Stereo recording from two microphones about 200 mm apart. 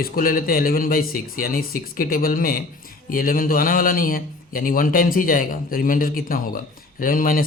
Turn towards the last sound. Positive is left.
turn(degrees=45)  # may be behind; listen again after turning